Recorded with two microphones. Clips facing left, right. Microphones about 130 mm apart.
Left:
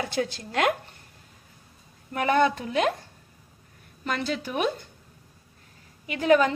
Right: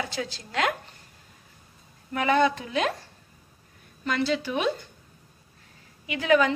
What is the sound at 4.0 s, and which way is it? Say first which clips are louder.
Speech: right 3 dB; 45° left (ahead or behind).